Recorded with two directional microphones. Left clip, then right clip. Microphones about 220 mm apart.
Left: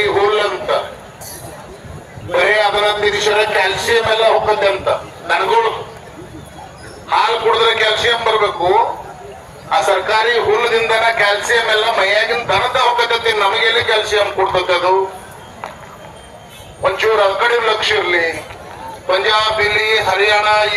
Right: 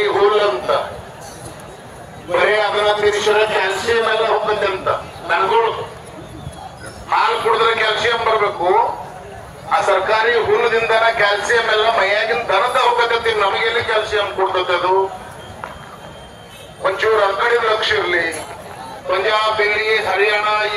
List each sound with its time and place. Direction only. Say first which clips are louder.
0.0 s a sound: even; 50° left (ahead or behind)
2.3 s a man's voice: left 2 dB; 50° left (ahead or behind)
7.1 s a man's voice: left 2 dB; 50° left (ahead or behind)
16.8 s a man's voice: left 2 dB; 35° left (ahead or behind)